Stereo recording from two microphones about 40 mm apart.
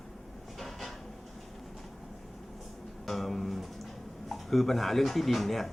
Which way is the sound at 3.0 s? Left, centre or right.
Centre.